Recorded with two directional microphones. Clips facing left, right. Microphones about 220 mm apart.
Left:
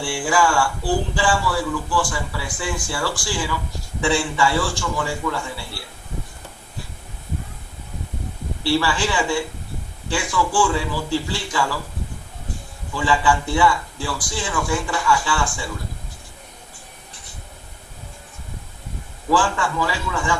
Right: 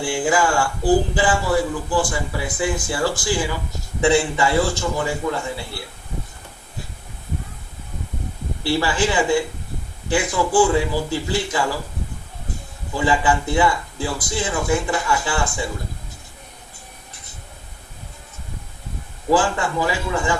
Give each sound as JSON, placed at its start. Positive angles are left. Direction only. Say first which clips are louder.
{"t": 0.0, "sound": "a man's voice", "louder": "right 1 dB", "side_deg": -20}
{"t": 8.6, "sound": "a man's voice", "louder": "right 1 dB", "side_deg": -20}
{"t": 13.1, "sound": "a man's voice", "louder": "even", "side_deg": -20}
{"t": 19.3, "sound": "a man's voice", "louder": "right 2 dB", "side_deg": -20}
{"t": 20.1, "sound": "a man's voice", "louder": "right 3 dB", "side_deg": -35}